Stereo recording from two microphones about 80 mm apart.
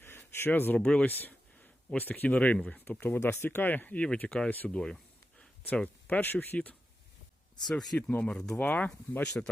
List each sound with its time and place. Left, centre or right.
0.2 s a sound: left
0.8 s speech: centre
1.0 s speech: left
4.4 s speech: left
4.7 s speech: centre
7.6 s speech: centre
7.9 s speech: centre
9.4 s speech: centre